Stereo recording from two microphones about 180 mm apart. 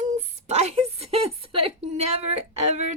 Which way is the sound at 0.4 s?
35° right (ahead or behind).